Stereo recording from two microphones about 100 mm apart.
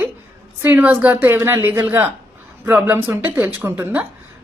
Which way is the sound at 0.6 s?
15° right (ahead or behind).